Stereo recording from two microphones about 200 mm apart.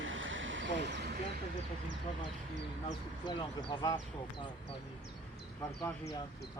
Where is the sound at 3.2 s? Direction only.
20° left (ahead or behind).